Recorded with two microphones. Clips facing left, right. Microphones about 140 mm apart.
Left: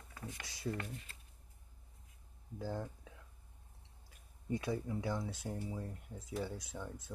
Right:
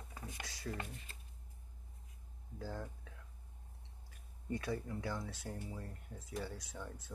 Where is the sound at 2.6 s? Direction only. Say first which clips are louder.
Left 4 dB; 15° left (ahead or behind).